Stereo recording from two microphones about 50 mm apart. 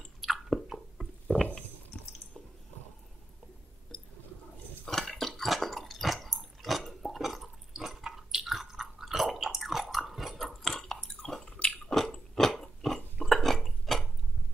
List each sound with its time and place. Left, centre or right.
0.2 s chewing: centre
1.3 s a sound: centre
4.8 s drip: centre